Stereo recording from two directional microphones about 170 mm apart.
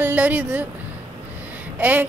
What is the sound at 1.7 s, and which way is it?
Speech, 10° right (ahead or behind).